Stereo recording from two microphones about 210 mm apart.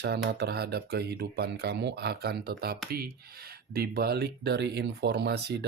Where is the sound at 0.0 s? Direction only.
50° right (ahead or behind).